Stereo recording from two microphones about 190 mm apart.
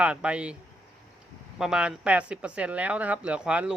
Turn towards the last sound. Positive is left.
turn(degrees=-5)  # may be behind; listen again after turning